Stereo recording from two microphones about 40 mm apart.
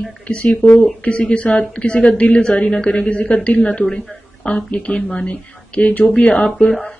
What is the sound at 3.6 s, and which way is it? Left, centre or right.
Speech, left.